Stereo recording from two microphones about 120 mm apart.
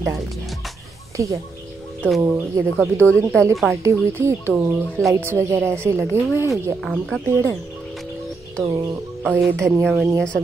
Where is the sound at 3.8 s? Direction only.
20° right (ahead or behind).